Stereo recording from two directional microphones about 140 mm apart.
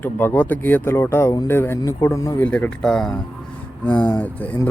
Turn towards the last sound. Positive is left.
turn(degrees=10)  # may be behind; listen again after turning